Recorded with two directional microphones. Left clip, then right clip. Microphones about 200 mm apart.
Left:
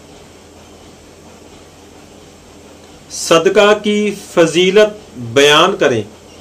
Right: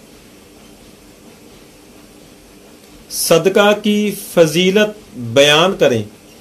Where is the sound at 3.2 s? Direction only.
45° right (ahead or behind).